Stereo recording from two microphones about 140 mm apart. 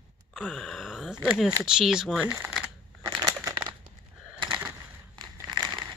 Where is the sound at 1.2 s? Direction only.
Centre (ahead or behind).